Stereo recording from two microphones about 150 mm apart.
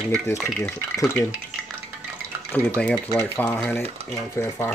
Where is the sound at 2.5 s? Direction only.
10° left (ahead or behind).